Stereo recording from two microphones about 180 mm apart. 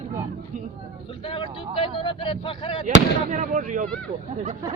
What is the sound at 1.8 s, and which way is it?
Speech, 30° left (ahead or behind).